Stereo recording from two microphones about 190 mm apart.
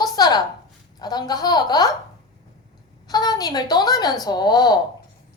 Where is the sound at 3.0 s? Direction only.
20° left (ahead or behind).